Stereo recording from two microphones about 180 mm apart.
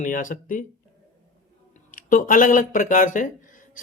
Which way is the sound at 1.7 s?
50° left (ahead or behind).